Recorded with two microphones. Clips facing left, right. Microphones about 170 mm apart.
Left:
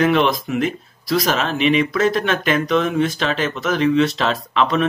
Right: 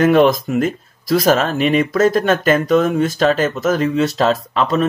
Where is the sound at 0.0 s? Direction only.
45° right (ahead or behind).